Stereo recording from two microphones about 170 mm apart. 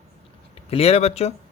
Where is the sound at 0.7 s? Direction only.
35° left (ahead or behind).